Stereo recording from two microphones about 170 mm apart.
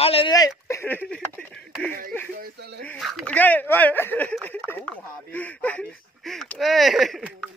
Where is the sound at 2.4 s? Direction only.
70° right (ahead or behind).